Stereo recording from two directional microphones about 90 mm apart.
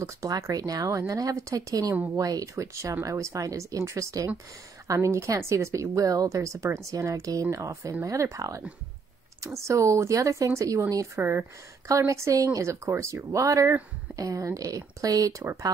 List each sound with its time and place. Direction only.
0.2 s speech: 40° right (ahead or behind)